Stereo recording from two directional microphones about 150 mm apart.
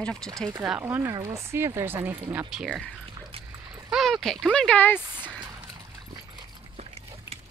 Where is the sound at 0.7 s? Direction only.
15° right (ahead or behind).